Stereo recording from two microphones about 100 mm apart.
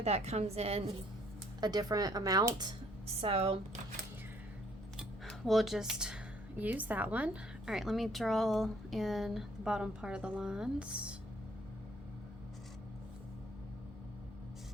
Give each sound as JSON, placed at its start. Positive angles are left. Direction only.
{"t": 0.0, "sound": "a woman's voice", "side_deg": -90}
{"t": 1.6, "sound": "speech", "side_deg": -40}
{"t": 3.2, "sound": "speech", "side_deg": -70}
{"t": 4.9, "sound": "a sound", "side_deg": 0}
{"t": 6.6, "sound": "a woman's voice", "side_deg": -15}
{"t": 7.7, "sound": "a woman's voice", "side_deg": -5}